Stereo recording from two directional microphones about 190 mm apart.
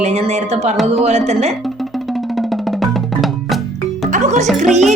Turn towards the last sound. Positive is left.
turn(degrees=0)  # may be behind; listen again after turning